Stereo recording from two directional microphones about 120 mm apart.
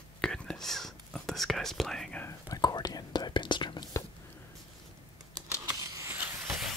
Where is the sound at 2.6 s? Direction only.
35° left (ahead or behind).